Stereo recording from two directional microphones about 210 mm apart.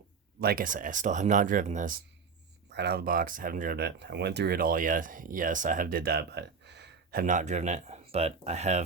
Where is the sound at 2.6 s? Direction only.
50° right (ahead or behind).